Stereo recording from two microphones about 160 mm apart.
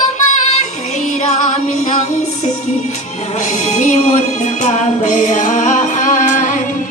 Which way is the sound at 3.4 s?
50° left (ahead or behind).